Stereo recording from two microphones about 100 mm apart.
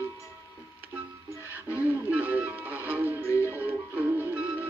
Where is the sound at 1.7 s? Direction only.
15° right (ahead or behind).